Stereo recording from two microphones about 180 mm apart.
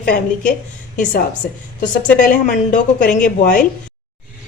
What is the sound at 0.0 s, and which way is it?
Speech, 55° left (ahead or behind).